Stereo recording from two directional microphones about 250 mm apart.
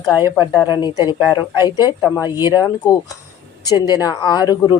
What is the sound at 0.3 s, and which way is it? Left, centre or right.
A woman's voice, centre.